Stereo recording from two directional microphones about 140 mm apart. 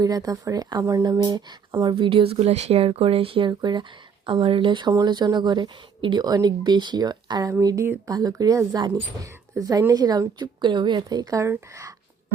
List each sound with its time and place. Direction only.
0.0 s speech: 25° right (ahead or behind)